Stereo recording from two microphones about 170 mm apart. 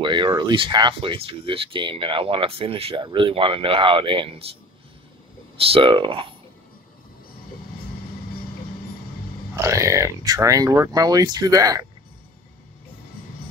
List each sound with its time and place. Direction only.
0.0 s speech: 25° right (ahead or behind)
5.7 s speech: 30° right (ahead or behind)
9.6 s speech: 15° right (ahead or behind)